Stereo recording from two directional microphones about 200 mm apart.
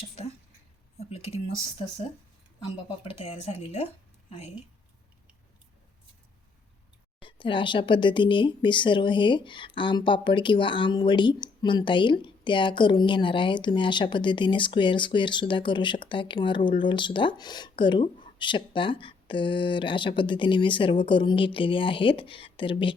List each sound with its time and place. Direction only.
0.9 s a sound: 30° left (ahead or behind)
3.0 s speech: 30° left (ahead or behind)
7.2 s speech: 25° left (ahead or behind)